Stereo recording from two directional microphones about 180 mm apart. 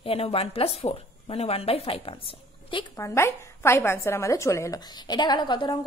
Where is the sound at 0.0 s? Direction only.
30° left (ahead or behind).